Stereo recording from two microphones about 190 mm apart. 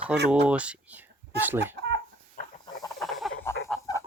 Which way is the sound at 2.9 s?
Centre (ahead or behind).